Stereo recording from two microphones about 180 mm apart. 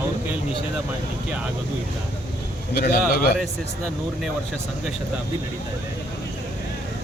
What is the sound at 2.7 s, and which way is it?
Speech, 65° left (ahead or behind).